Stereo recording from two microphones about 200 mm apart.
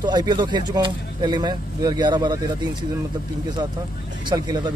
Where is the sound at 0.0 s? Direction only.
20° right (ahead or behind).